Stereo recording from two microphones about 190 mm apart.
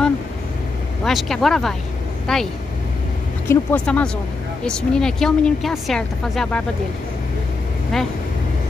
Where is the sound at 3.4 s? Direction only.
5° left (ahead or behind).